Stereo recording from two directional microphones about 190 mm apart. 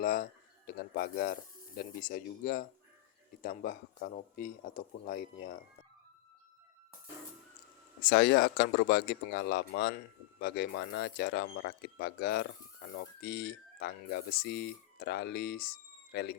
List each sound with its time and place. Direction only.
0.0 s speech: 50° left (ahead or behind)
8.0 s speech: 60° left (ahead or behind)